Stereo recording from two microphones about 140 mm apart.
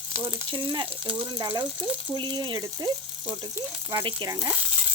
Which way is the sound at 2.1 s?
35° right (ahead or behind).